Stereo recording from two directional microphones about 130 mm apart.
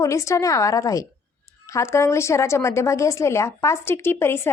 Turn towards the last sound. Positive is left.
turn(degrees=20)  # may be behind; listen again after turning